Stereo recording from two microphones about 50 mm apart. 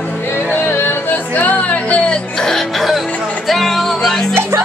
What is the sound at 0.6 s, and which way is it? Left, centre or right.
Music, left.